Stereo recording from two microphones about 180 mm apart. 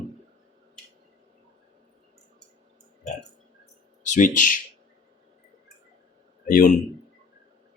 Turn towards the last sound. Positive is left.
turn(degrees=45)  # may be behind; listen again after turning